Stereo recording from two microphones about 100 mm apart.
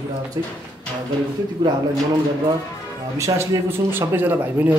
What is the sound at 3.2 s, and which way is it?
Speech, 30° right (ahead or behind).